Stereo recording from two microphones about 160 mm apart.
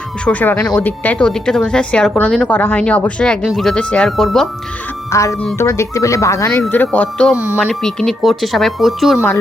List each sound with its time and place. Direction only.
0.3 s speech: 10° left (ahead or behind)
5.1 s speech: 20° left (ahead or behind)
7.3 s speech: 10° right (ahead or behind)
7.7 s speech: 5° left (ahead or behind)